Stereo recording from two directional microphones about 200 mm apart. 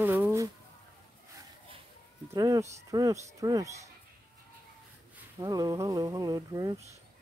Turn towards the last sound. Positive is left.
turn(degrees=-20)  # may be behind; listen again after turning